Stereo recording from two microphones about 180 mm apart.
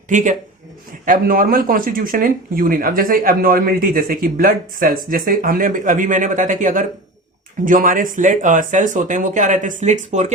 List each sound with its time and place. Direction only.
0.1 s speech: 45° right (ahead or behind)